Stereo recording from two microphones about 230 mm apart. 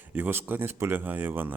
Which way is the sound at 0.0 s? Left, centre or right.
Centre.